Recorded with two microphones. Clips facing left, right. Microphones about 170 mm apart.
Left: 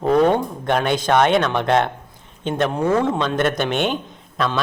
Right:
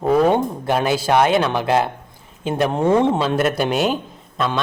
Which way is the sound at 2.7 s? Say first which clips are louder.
Right 4 dB; 25° right (ahead or behind).